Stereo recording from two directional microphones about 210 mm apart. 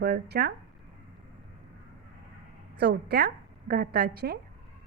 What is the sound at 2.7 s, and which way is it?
A woman's voice, 50° right (ahead or behind).